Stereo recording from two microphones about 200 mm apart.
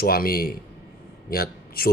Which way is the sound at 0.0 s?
50° left (ahead or behind).